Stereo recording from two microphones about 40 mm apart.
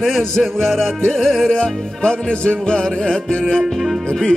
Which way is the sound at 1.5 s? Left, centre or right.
Left.